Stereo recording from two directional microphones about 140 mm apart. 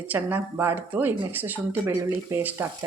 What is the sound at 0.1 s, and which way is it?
Speech, 15° right (ahead or behind).